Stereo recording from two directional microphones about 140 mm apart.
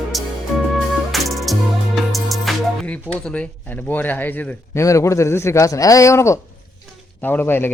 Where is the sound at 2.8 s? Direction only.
10° left (ahead or behind).